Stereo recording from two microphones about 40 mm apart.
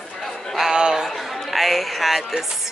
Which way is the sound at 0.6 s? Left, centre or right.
Centre.